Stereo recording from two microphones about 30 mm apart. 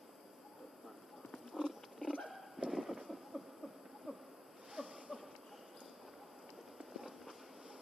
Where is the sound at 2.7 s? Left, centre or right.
Centre.